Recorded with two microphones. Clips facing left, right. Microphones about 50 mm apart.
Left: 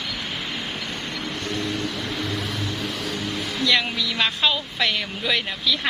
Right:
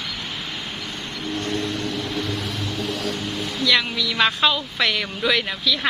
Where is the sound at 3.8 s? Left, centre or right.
Centre.